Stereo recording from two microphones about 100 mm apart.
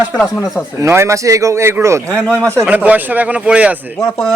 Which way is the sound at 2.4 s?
25° right (ahead or behind).